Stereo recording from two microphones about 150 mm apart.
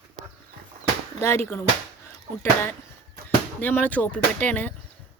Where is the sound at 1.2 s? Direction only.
15° left (ahead or behind).